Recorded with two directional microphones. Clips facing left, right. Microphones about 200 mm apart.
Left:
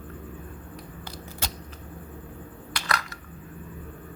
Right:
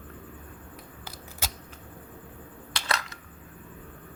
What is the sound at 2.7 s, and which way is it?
Crushing, 25° right (ahead or behind).